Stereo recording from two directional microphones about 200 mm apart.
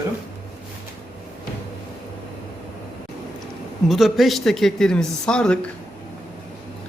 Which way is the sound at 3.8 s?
Centre (ahead or behind).